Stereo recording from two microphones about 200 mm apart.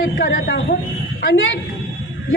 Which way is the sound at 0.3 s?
55° left (ahead or behind).